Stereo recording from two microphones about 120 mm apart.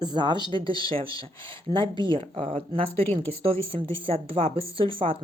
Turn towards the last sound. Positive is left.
turn(degrees=-50)  # may be behind; listen again after turning